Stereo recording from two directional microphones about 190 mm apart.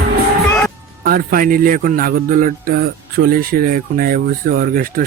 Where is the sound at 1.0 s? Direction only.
50° right (ahead or behind).